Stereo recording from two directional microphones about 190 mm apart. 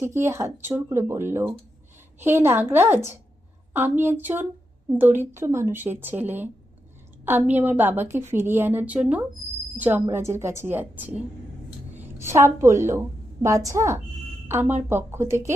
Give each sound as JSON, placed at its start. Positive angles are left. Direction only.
{"t": 0.0, "sound": "a woman's voice", "side_deg": -15}
{"t": 12.2, "sound": "a woman's voice", "side_deg": -15}